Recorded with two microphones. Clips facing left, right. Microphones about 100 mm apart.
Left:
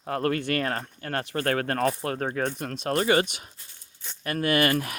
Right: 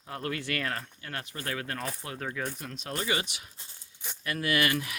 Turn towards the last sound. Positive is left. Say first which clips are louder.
# left 5 dB
turn(degrees=45)  # may be behind; listen again after turning